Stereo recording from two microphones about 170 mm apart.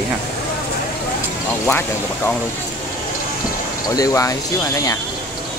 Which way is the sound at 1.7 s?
10° left (ahead or behind).